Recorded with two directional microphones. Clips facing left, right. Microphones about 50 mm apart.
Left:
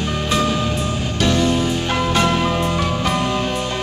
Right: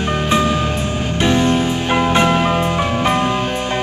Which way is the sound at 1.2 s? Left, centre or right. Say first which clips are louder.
Right 2 dB; right.